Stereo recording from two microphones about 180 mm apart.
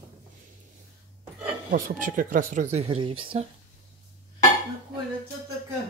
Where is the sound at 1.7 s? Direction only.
45° right (ahead or behind); by 3.4 s 30° right (ahead or behind).